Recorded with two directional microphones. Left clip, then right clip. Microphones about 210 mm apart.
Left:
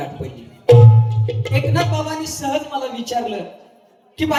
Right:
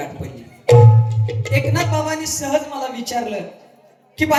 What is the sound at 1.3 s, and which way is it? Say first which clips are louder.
Music: right 1 dB; 40° right (ahead or behind).